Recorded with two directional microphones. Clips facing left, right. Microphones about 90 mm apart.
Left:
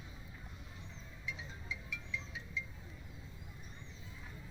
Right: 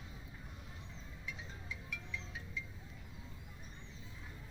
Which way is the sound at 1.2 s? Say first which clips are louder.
Left 3 dB; 50° right (ahead or behind).